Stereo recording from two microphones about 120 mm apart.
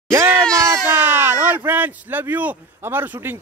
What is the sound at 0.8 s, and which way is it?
Speech, 15° right (ahead or behind).